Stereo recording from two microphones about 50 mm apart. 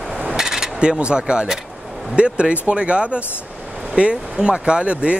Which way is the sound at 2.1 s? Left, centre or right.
Right.